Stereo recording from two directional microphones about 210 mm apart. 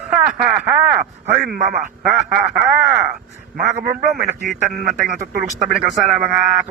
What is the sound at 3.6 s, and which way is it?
Speech, 35° right (ahead or behind).